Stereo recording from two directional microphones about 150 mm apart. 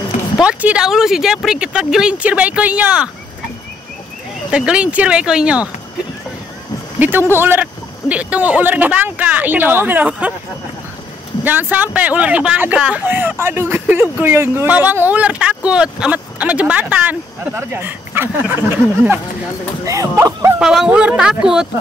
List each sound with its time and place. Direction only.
0.4 s speech: 10° right (ahead or behind)
4.5 s speech: 5° right (ahead or behind)
7.0 s a man's voice: 15° right (ahead or behind)
11.4 s speech: 10° right (ahead or behind)
19.8 s speech: 20° right (ahead or behind)
20.6 s speech: 5° right (ahead or behind)